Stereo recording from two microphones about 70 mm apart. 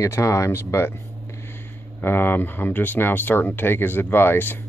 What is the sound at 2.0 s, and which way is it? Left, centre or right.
Speech, left.